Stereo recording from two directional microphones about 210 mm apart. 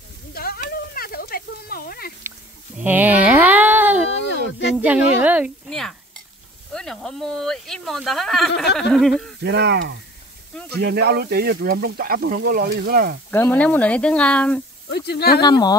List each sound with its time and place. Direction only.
0.3 s a sound: 45° left (ahead or behind)
2.8 s a sound: 10° right (ahead or behind)
4.7 s speech: 5° right (ahead or behind)
9.4 s speech: 55° right (ahead or behind)
13.3 s speech: 10° left (ahead or behind)
14.9 s speech: 50° left (ahead or behind)
15.4 s speech: 20° left (ahead or behind)